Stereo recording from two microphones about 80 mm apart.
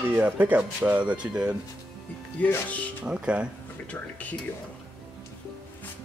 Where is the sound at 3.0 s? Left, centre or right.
Centre.